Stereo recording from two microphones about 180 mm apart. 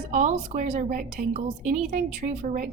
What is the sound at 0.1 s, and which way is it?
A woman's voice, 40° right (ahead or behind).